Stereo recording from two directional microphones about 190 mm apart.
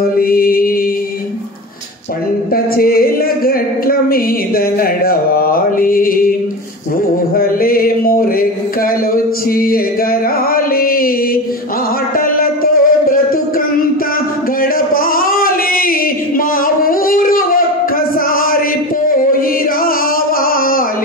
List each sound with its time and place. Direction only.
0.0 s mantra: 50° left (ahead or behind)
2.5 s a sound: 50° left (ahead or behind)
7.3 s a sound: 50° left (ahead or behind)
12.4 s music: 50° left (ahead or behind)
14.6 s singing: 50° left (ahead or behind)
19.0 s music: 50° left (ahead or behind)